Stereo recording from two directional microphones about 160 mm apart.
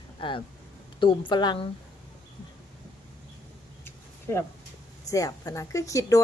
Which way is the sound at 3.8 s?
15° left (ahead or behind).